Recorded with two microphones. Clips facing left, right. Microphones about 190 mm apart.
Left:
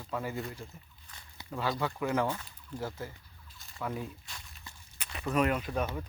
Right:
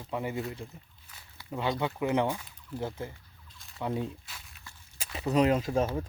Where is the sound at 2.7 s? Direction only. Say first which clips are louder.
Right 3 dB; 25° right (ahead or behind).